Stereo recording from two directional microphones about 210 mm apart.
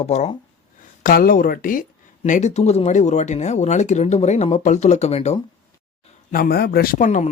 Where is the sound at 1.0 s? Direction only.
45° left (ahead or behind).